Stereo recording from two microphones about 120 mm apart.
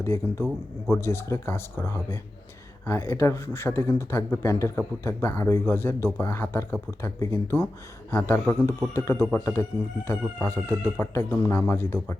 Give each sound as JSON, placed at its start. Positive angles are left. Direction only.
{"t": 0.0, "sound": "speech", "side_deg": 20}